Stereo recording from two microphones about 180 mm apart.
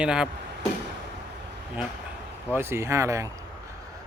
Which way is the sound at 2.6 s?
15° right (ahead or behind).